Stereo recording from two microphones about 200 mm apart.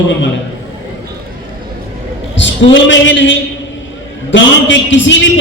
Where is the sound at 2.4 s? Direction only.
65° left (ahead or behind).